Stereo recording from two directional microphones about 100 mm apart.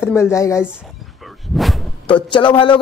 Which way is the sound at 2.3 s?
55° left (ahead or behind).